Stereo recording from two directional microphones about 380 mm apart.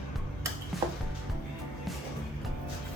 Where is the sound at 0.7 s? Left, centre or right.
Centre.